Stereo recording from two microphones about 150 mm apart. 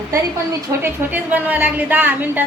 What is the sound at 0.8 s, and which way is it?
A woman's voice, 10° right (ahead or behind).